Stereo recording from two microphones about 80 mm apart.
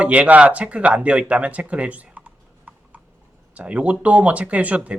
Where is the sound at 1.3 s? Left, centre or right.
Centre.